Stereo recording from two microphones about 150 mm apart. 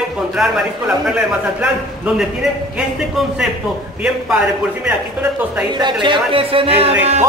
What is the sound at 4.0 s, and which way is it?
Speech, 5° right (ahead or behind).